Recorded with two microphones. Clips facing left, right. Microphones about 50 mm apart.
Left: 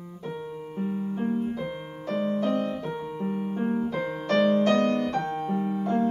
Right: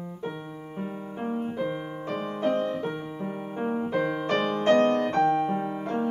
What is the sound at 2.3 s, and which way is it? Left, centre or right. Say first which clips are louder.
Music: right 1 dB; right.